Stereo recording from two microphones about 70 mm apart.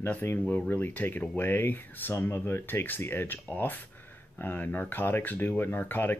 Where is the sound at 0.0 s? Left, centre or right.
Left.